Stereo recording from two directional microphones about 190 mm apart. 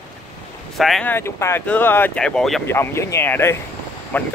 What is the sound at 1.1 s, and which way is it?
Speech, 15° left (ahead or behind).